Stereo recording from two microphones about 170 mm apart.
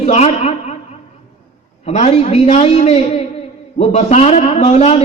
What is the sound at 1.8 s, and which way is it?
A man's voice, 40° left (ahead or behind).